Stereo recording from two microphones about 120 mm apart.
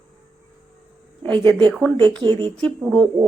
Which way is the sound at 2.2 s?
40° right (ahead or behind).